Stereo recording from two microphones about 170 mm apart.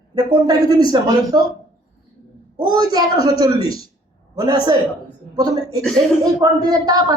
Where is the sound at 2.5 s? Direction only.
25° right (ahead or behind).